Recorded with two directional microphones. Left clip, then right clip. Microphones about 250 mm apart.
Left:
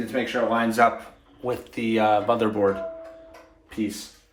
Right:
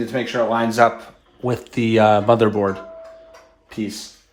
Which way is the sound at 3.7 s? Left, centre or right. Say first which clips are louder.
Right 1 dB; right.